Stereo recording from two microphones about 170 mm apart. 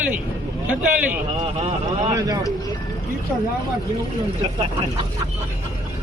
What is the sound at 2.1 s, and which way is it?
Speech, 20° right (ahead or behind).